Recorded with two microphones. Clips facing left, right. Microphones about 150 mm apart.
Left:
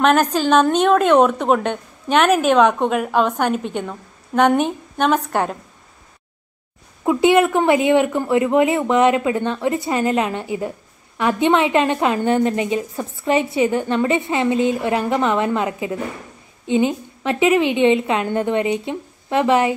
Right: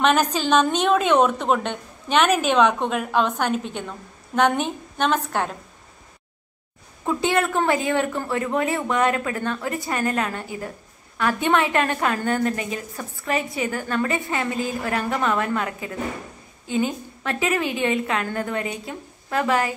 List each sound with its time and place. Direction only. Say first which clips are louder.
0.0 s a woman's voice: left 4 dB; 5° left (ahead or behind)
7.1 s a woman's voice: left 7 dB; 20° left (ahead or behind)